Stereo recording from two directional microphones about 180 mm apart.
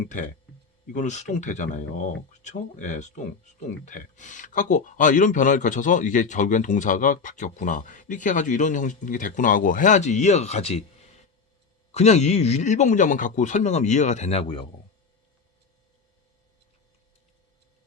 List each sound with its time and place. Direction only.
0.0 s speech: 45° left (ahead or behind)
11.9 s speech: 40° left (ahead or behind)